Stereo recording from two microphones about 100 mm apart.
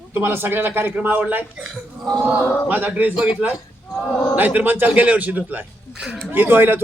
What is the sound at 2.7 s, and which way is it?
A man's voice, 20° right (ahead or behind).